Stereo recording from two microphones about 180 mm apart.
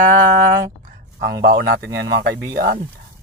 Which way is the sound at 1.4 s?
60° right (ahead or behind).